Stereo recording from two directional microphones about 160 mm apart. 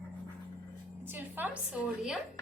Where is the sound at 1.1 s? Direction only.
10° right (ahead or behind).